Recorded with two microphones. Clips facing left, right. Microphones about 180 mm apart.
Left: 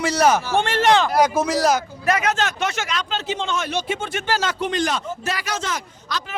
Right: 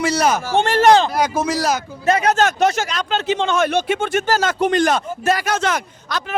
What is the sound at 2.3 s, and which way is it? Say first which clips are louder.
Speech: right 7 dB; 45° right (ahead or behind).